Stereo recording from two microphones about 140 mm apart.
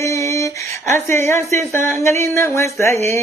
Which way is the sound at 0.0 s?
20° left (ahead or behind).